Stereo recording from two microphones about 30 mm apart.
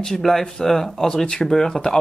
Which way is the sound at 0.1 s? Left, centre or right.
Centre.